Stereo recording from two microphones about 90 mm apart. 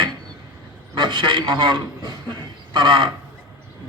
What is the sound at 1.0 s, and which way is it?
A man's voice, 60° right (ahead or behind).